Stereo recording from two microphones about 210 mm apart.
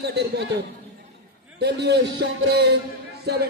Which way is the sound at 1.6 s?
50° right (ahead or behind).